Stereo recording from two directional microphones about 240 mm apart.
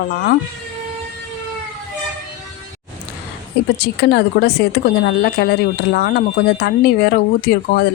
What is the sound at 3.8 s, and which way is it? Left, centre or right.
Speech, left.